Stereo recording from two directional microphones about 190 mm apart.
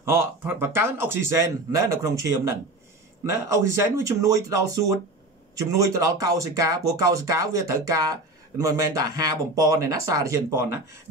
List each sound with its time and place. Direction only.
0.1 s speech: 10° right (ahead or behind)
5.6 s speech: 15° right (ahead or behind)